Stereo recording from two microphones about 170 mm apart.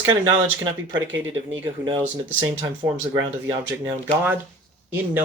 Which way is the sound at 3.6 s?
10° right (ahead or behind).